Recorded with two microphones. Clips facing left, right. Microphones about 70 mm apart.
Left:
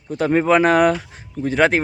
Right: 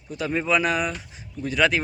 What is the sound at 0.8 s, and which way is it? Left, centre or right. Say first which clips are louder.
Speech: left 12 dB; left.